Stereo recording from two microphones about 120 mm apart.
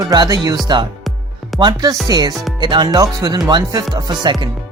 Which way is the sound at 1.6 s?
30° right (ahead or behind).